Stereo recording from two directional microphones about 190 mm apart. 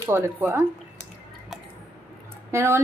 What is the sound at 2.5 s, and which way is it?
Speech, 15° right (ahead or behind).